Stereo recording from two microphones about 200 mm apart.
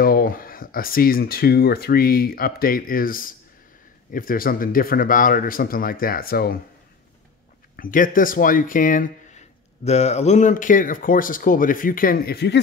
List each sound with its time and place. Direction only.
0.0 s speech: 45° left (ahead or behind)
7.7 s speech: 45° left (ahead or behind)